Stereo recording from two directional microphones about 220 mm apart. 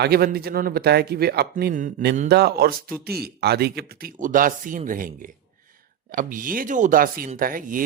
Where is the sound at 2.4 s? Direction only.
45° right (ahead or behind).